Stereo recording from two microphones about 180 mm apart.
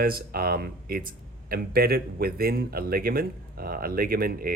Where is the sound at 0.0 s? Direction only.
55° right (ahead or behind).